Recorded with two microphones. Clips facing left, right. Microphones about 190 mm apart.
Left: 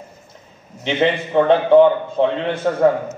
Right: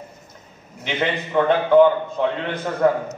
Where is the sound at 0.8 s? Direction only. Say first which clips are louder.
Left 6 dB; 25° left (ahead or behind).